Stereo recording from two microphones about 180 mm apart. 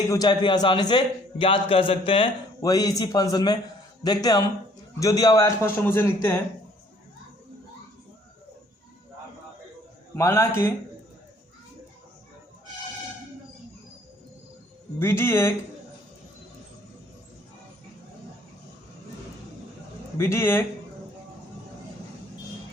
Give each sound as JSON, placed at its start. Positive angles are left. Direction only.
{"t": 0.1, "sound": "a man's voice", "side_deg": 25}
{"t": 10.2, "sound": "speech", "side_deg": 15}
{"t": 14.9, "sound": "speech", "side_deg": 15}
{"t": 20.1, "sound": "speech", "side_deg": 15}